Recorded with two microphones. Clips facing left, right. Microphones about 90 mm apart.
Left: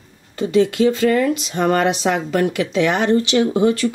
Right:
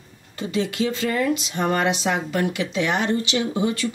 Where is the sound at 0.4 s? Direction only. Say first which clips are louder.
Left 8 dB; 50° left (ahead or behind).